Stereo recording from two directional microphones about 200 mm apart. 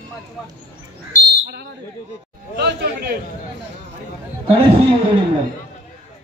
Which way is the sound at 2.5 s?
55° right (ahead or behind).